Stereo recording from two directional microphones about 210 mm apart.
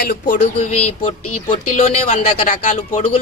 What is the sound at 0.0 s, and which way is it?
A man's voice, 40° left (ahead or behind).